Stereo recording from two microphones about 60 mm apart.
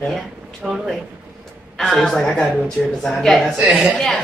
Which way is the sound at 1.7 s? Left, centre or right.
Centre.